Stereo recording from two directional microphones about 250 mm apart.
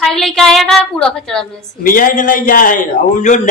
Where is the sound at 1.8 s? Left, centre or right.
Left.